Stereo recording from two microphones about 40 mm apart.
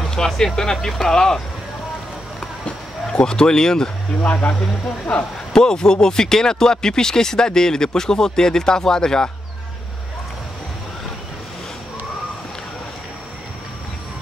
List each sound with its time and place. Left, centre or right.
0.0 s a sound: centre
0.6 s speech: centre
3.1 s speech: centre
4.2 s speech: left
5.5 s speech: centre